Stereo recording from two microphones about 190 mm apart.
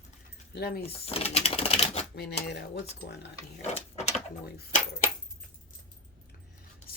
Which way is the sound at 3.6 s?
35° left (ahead or behind).